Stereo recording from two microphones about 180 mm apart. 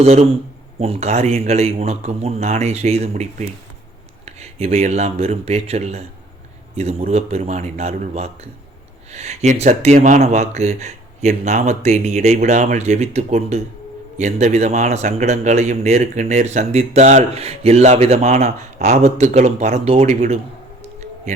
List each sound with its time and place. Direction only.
0.0 s a man's voice: 35° right (ahead or behind)